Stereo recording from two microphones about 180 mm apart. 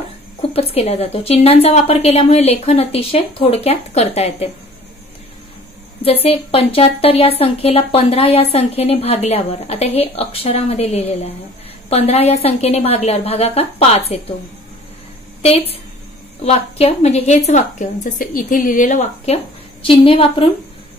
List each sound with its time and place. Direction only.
0.5 s a woman's voice: 35° left (ahead or behind)
6.0 s a woman's voice: 35° left (ahead or behind)
15.4 s a woman's voice: 35° left (ahead or behind)